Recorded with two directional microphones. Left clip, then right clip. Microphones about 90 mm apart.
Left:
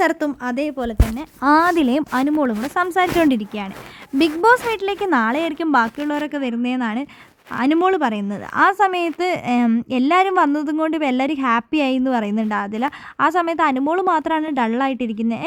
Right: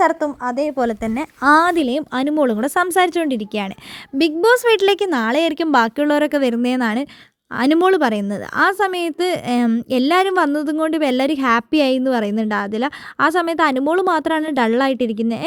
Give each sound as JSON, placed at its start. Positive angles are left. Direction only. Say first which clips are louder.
{"t": 0.0, "sound": "a woman's voice", "louder": "right 2 dB", "side_deg": 40}
{"t": 1.4, "sound": "a woman's voice", "louder": "right 2 dB", "side_deg": -15}
{"t": 1.7, "sound": "speech", "louder": "even", "side_deg": 0}
{"t": 2.1, "sound": "a woman's voice", "louder": "right 5 dB", "side_deg": -25}
{"t": 2.6, "sound": "a woman's voice", "louder": "right 3 dB", "side_deg": -50}
{"t": 2.8, "sound": "speech", "louder": "right 2 dB", "side_deg": -30}
{"t": 3.2, "sound": "speech", "louder": "left 3 dB", "side_deg": 15}
{"t": 4.7, "sound": "speech", "louder": "right 8 dB", "side_deg": -55}
{"t": 5.0, "sound": "a woman's voice", "louder": "left 2 dB", "side_deg": -20}
{"t": 5.3, "sound": "speech", "louder": "right 3 dB", "side_deg": -40}
{"t": 6.0, "sound": "a woman's voice", "louder": "right 7 dB", "side_deg": -55}
{"t": 7.5, "sound": "speech", "louder": "right 2 dB", "side_deg": -35}
{"t": 8.5, "sound": "a woman's voice", "louder": "left 1 dB", "side_deg": -15}